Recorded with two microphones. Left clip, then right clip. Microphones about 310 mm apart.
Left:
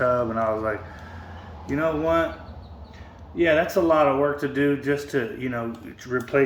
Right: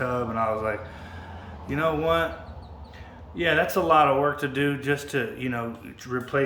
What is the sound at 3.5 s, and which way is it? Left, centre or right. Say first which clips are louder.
Speech: even; centre.